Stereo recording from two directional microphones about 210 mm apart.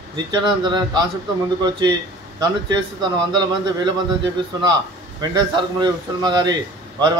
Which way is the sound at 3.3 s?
20° right (ahead or behind).